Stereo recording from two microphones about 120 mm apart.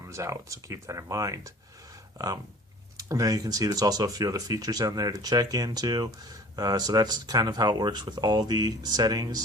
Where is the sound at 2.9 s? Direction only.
25° right (ahead or behind).